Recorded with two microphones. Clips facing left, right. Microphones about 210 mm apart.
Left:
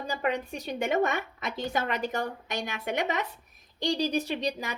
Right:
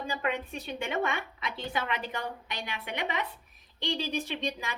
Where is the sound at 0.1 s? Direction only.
40° left (ahead or behind).